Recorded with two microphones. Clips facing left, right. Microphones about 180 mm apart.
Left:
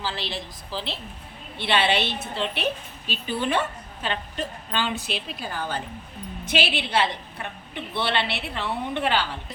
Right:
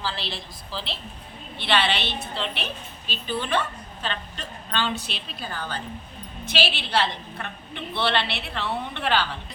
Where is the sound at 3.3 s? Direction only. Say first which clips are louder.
Left 1 dB; 15° left (ahead or behind).